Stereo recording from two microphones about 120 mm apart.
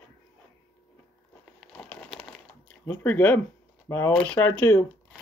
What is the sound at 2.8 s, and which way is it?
Speech, 15° left (ahead or behind).